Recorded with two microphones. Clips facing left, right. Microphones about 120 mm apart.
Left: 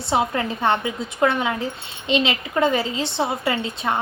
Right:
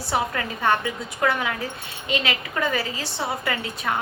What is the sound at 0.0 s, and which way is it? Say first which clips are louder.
A woman's voice: left 4 dB; 25° left (ahead or behind).